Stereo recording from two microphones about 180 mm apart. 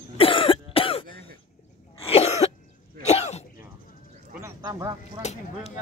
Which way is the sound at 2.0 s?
35° left (ahead or behind).